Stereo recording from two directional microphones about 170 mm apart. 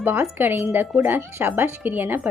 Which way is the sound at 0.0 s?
10° right (ahead or behind).